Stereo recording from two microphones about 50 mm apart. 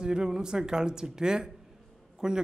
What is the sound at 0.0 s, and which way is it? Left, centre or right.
A man's voice, centre.